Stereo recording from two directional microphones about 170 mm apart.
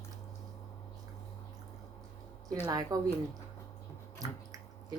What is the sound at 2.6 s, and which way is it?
Speech, 20° right (ahead or behind).